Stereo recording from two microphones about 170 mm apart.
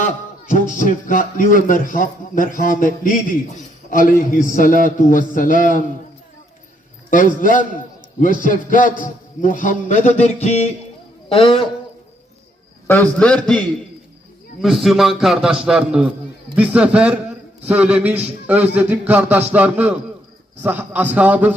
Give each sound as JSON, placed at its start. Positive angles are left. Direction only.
{"t": 0.0, "sound": "speech", "side_deg": 50}
{"t": 7.1, "sound": "a man's voice", "side_deg": 50}
{"t": 12.9, "sound": "a man's voice", "side_deg": 10}